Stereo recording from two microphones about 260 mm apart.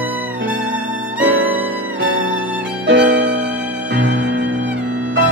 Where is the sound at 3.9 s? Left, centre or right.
Right.